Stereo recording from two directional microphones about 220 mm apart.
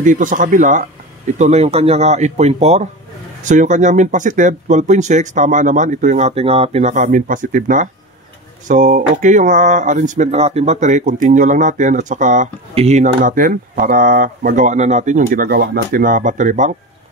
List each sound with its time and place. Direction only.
0.0 s speech: 35° right (ahead or behind)